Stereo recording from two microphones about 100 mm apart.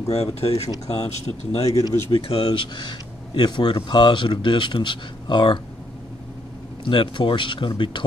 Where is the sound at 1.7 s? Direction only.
35° left (ahead or behind).